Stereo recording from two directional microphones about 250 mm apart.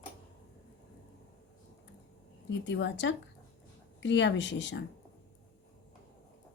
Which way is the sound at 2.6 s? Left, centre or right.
Left.